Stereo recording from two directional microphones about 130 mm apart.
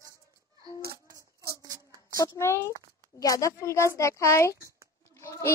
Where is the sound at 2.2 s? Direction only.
25° left (ahead or behind).